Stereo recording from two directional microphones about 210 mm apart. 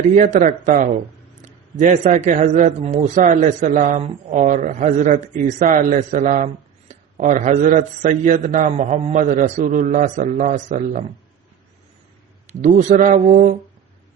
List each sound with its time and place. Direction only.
0.2 s a man's voice: 35° right (ahead or behind)
12.5 s a man's voice: 35° right (ahead or behind)